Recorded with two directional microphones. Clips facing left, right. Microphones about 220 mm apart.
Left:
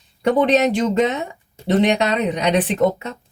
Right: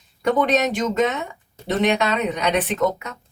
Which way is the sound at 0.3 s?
30° left (ahead or behind).